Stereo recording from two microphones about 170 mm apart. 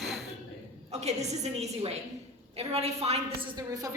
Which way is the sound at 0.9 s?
40° right (ahead or behind).